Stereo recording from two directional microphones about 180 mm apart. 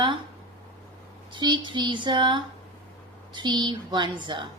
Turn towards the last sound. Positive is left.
turn(degrees=-25)  # may be behind; listen again after turning